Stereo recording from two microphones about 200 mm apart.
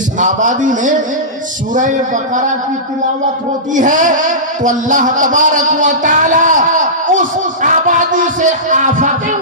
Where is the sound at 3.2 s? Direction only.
40° right (ahead or behind).